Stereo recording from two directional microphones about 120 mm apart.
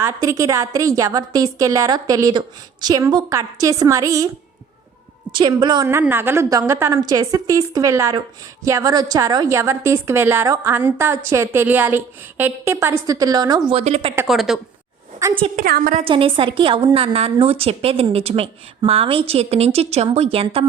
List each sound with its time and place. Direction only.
0.0 s a woman's voice: 25° right (ahead or behind)
5.3 s a woman's voice: 40° right (ahead or behind)
5.9 s a woman's voice: 20° right (ahead or behind); by 13.7 s 35° right (ahead or behind)
13.7 s speech: 60° right (ahead or behind)
14.3 s a woman's voice: centre (ahead or behind)
15.5 s a woman's voice: 90° right
16.0 s a woman's voice: 45° right (ahead or behind)